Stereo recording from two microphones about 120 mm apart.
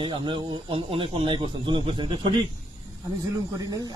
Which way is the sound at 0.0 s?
45° right (ahead or behind).